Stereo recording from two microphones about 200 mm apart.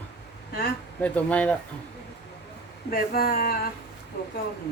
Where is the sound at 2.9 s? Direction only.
50° left (ahead or behind).